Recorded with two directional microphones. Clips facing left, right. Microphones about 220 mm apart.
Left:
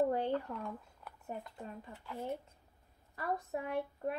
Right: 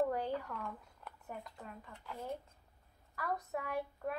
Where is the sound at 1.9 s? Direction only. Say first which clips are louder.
Left 3 dB; 5° left (ahead or behind).